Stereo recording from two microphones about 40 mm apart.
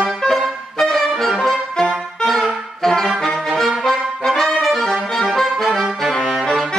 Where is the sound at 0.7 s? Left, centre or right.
Centre.